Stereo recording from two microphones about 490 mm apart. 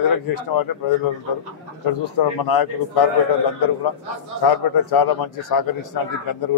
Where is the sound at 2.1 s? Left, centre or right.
Left.